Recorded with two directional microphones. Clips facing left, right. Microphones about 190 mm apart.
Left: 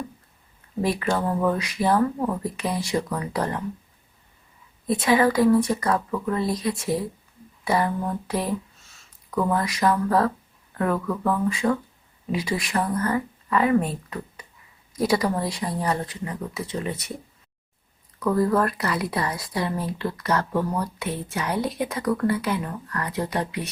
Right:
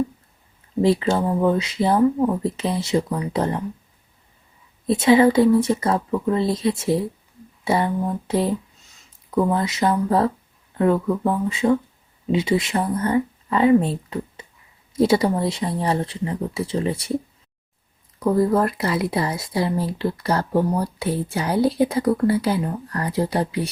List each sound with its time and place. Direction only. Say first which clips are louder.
0.8 s speech: right 5 dB; 25° right (ahead or behind)
4.9 s speech: right 5 dB; 25° right (ahead or behind)
7.6 s a sound: right 2 dB; 25° right (ahead or behind)
9.4 s speech: right 2 dB; 25° right (ahead or behind)
18.2 s speech: right 3 dB; 25° right (ahead or behind)